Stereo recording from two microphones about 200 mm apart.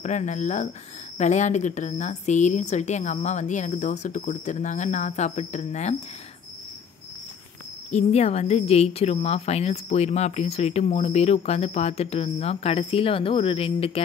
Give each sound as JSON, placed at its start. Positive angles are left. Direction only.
{"t": 0.0, "sound": "speech", "side_deg": 35}
{"t": 7.9, "sound": "speech", "side_deg": 30}